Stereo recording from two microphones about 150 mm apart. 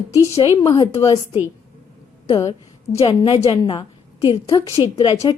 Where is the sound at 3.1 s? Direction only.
30° left (ahead or behind).